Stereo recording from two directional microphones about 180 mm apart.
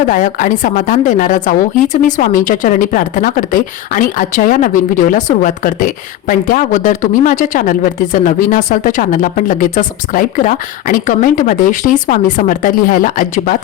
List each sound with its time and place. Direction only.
0.1 s a woman's voice: 45° left (ahead or behind)